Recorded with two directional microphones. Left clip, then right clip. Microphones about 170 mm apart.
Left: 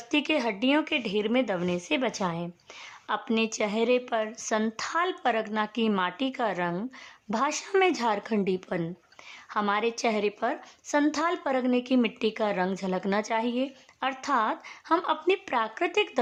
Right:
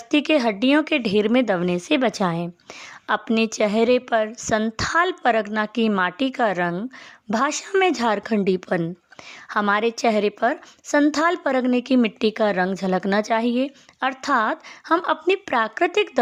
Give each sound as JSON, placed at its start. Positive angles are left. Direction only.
{"t": 0.1, "sound": "a woman's voice", "side_deg": -35}